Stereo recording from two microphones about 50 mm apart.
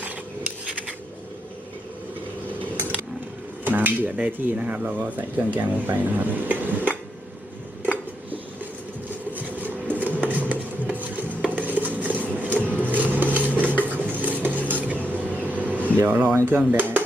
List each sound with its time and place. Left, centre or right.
3.6 s speech: right
9.3 s a sound: right
13.9 s stir: right
15.0 s vehicle: right
16.0 s speech: right